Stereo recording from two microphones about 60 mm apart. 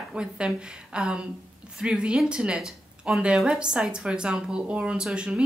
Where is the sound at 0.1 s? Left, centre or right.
Centre.